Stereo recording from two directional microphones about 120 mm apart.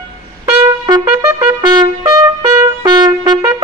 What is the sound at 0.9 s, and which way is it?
Trumpet, 35° right (ahead or behind).